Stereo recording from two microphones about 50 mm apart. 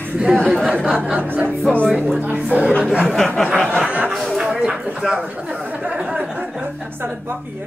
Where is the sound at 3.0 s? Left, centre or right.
Centre.